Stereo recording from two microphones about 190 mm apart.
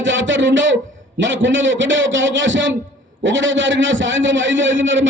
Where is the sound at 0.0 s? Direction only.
80° right.